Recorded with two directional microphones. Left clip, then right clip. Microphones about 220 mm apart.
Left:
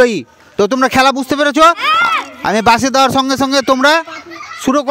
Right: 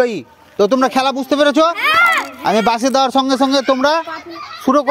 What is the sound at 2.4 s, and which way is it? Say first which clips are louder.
A man's voice: left 6 dB; 45° left (ahead or behind).